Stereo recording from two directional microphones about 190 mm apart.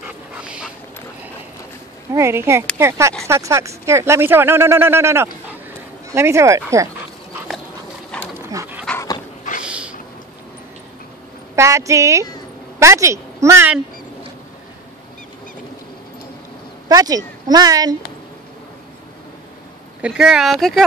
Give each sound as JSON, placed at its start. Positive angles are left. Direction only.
{"t": 0.0, "sound": "dog", "side_deg": -5}
{"t": 2.1, "sound": "speech", "side_deg": -15}
{"t": 8.4, "sound": "dog", "side_deg": -15}
{"t": 9.7, "sound": "a sound", "side_deg": -5}
{"t": 11.5, "sound": "a woman's voice", "side_deg": -15}
{"t": 16.9, "sound": "speech", "side_deg": -20}
{"t": 20.0, "sound": "speech", "side_deg": -5}